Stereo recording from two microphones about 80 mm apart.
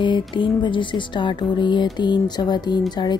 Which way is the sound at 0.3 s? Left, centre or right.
Left.